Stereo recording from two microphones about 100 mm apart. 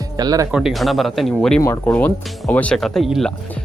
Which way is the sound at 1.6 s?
30° left (ahead or behind).